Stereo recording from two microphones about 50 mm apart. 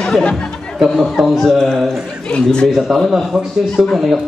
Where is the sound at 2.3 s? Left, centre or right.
Centre.